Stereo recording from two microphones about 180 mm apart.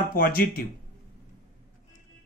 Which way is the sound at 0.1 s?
55° left (ahead or behind).